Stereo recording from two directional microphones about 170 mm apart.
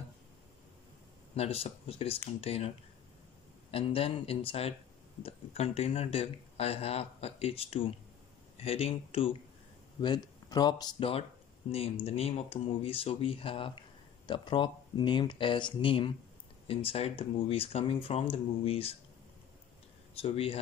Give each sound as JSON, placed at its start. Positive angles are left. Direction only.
{"t": 1.3, "sound": "speech", "side_deg": 35}
{"t": 3.7, "sound": "speech", "side_deg": 35}
{"t": 20.2, "sound": "speech", "side_deg": 35}